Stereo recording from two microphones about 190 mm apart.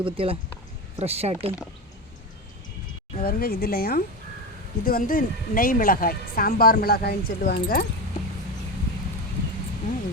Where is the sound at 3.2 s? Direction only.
50° left (ahead or behind).